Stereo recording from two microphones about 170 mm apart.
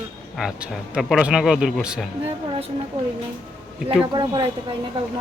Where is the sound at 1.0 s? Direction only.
Centre (ahead or behind).